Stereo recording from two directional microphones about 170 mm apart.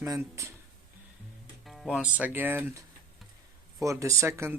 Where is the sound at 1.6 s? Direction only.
Centre (ahead or behind).